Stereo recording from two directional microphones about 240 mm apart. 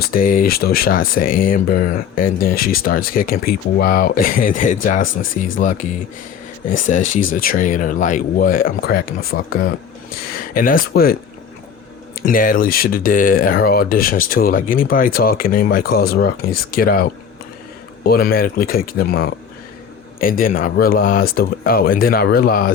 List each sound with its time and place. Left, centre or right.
0.0 s speech: left
12.2 s speech: left